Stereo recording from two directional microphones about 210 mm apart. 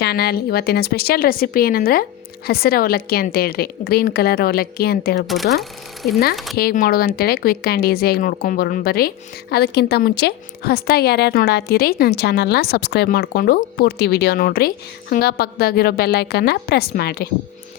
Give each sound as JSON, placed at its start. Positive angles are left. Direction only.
{"t": 0.0, "sound": "speech", "side_deg": 50}
{"t": 5.2, "sound": "speech", "side_deg": 0}
{"t": 6.6, "sound": "speech", "side_deg": 45}